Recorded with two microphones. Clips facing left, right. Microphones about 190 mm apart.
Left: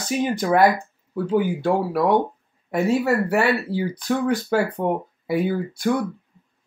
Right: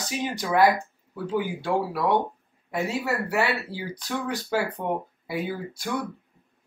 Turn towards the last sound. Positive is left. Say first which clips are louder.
# left 9 dB
turn(degrees=50)  # may be behind; listen again after turning